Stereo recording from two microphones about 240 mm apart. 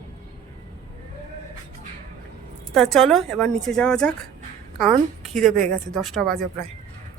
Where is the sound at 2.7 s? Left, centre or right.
Centre.